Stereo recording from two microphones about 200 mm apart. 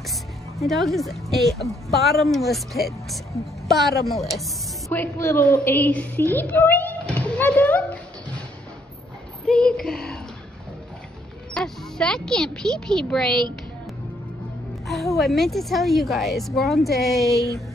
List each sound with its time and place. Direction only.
0.6 s a woman's voice: centre (ahead or behind)
4.8 s a woman's voice: 10° left (ahead or behind)
9.5 s a woman's voice: 5° left (ahead or behind)
11.5 s a woman's voice: 5° left (ahead or behind)
14.9 s a woman's voice: centre (ahead or behind)